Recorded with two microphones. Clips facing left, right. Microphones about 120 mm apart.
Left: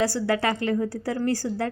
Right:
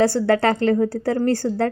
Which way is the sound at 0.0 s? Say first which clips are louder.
Right 6 dB; 55° right (ahead or behind).